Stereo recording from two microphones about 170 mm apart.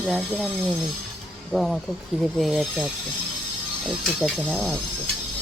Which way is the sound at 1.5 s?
Centre (ahead or behind).